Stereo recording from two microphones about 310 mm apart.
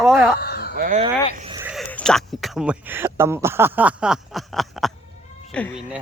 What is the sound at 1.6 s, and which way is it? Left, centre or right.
Speech, centre.